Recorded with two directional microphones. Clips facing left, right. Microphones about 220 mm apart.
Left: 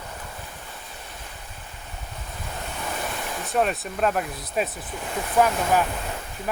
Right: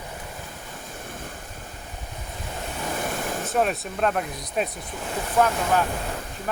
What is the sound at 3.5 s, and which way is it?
Speech, centre (ahead or behind).